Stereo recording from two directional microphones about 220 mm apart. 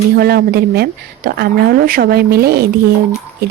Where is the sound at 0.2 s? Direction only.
45° right (ahead or behind).